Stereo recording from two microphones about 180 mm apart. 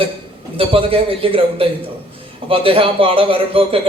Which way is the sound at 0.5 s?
30° right (ahead or behind).